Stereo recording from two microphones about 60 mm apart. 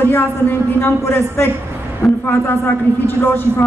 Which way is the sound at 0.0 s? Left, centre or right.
Left.